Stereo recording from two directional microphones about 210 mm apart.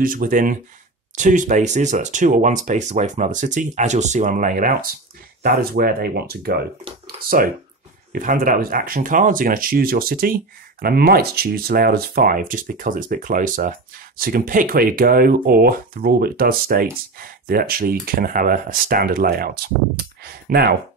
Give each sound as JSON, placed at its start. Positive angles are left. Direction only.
{"t": 0.0, "sound": "speech", "side_deg": -40}